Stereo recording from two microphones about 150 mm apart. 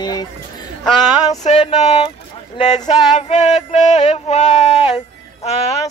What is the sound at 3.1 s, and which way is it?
Music, 50° left (ahead or behind).